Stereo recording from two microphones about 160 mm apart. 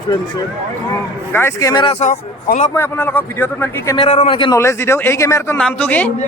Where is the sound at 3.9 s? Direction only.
40° left (ahead or behind).